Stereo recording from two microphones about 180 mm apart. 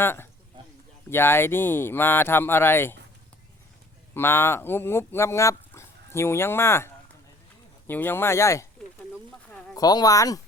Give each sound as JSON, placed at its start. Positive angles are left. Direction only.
{"t": 0.0, "sound": "speech", "side_deg": 10}
{"t": 4.1, "sound": "speech", "side_deg": 15}
{"t": 9.7, "sound": "speech", "side_deg": 20}